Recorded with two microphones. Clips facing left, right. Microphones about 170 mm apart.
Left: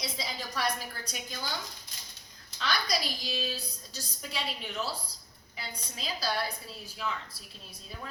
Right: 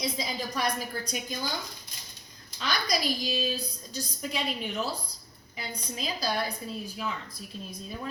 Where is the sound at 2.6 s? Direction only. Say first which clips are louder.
Right 2 dB; 15° right (ahead or behind).